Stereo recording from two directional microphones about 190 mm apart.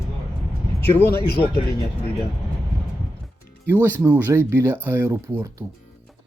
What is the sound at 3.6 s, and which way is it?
Speech, 10° right (ahead or behind).